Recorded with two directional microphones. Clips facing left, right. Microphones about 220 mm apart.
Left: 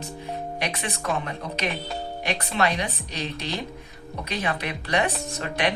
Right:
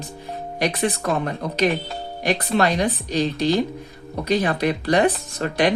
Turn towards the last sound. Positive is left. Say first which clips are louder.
# right 6 dB
turn(degrees=-35)  # may be behind; listen again after turning